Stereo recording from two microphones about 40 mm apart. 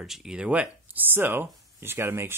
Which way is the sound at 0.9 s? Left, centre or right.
Right.